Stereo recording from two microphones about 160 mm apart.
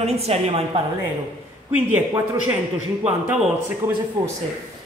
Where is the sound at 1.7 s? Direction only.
10° right (ahead or behind).